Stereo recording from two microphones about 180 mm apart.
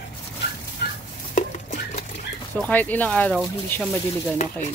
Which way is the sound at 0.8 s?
60° left (ahead or behind).